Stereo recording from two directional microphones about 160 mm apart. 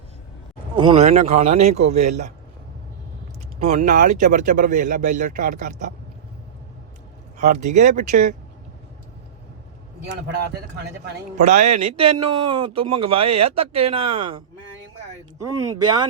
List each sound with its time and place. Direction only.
0.9 s speech: 45° right (ahead or behind)
3.7 s speech: 50° right (ahead or behind)
7.3 s speech: 50° right (ahead or behind)
11.3 s speech: 50° right (ahead or behind)
12.1 s speech: 35° right (ahead or behind)